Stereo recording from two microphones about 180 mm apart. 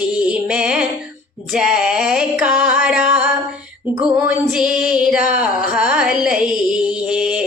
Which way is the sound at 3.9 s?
20° right (ahead or behind).